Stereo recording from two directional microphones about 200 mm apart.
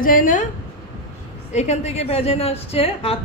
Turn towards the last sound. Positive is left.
turn(degrees=30)  # may be behind; listen again after turning